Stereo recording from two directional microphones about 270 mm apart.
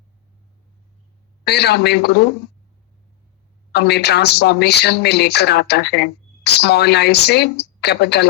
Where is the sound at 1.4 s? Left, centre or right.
Left.